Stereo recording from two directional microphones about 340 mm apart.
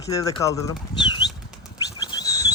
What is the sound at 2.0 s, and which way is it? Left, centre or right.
Bird, centre.